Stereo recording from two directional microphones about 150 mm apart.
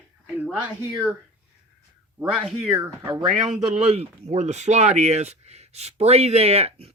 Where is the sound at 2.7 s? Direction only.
20° right (ahead or behind).